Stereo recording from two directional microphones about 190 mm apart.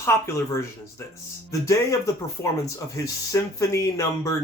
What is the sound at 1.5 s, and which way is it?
Speech, 15° left (ahead or behind).